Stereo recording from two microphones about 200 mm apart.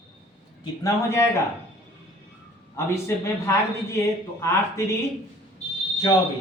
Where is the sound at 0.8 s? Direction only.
15° left (ahead or behind).